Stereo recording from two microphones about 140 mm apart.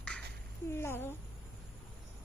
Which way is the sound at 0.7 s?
15° left (ahead or behind).